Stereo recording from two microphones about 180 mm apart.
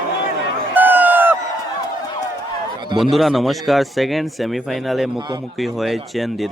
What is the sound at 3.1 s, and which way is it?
Speech, centre (ahead or behind).